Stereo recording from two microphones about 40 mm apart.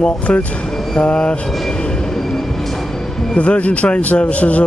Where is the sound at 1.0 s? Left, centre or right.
Left.